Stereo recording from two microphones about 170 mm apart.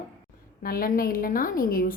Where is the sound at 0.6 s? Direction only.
60° left (ahead or behind).